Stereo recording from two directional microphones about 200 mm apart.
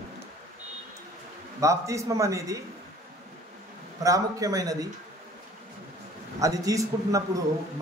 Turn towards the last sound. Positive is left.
turn(degrees=-15)  # may be behind; listen again after turning